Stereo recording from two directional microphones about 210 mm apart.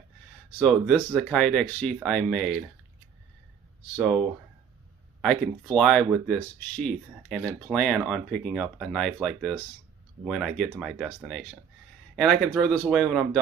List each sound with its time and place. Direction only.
0.6 s speech: 5° left (ahead or behind)
5.2 s speech: 5° left (ahead or behind)
12.2 s speech: 5° left (ahead or behind)